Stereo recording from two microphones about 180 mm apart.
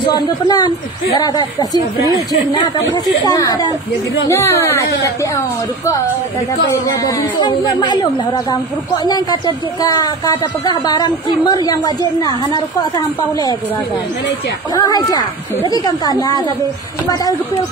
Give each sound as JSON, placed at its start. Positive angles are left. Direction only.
{"t": 0.1, "sound": "a woman's voice", "side_deg": 20}
{"t": 2.0, "sound": "speech", "side_deg": -20}
{"t": 2.5, "sound": "a woman's voice", "side_deg": 20}
{"t": 6.7, "sound": "a woman's voice", "side_deg": 20}
{"t": 14.7, "sound": "a woman's voice", "side_deg": 20}